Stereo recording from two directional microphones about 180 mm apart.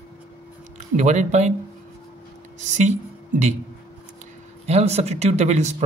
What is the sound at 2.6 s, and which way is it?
Speech, 40° right (ahead or behind).